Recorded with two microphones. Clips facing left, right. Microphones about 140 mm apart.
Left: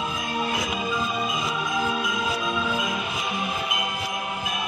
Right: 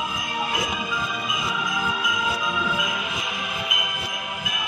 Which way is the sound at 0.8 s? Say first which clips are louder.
Left 3 dB; 30° left (ahead or behind).